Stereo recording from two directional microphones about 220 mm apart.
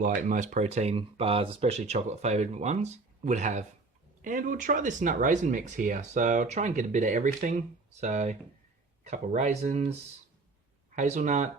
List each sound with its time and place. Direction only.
0.0 s speech: 35° right (ahead or behind)
10.9 s speech: 30° right (ahead or behind)